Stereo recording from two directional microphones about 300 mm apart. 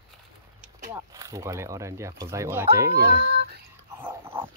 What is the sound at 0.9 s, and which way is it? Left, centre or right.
Speech, centre.